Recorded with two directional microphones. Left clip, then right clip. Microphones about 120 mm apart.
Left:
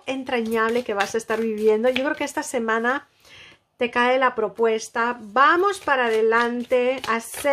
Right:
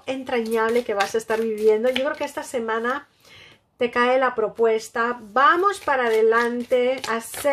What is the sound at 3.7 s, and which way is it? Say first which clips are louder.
Speech: even; 25° left (ahead or behind).